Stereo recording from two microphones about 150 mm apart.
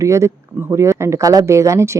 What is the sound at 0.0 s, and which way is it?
A woman's voice, 20° right (ahead or behind).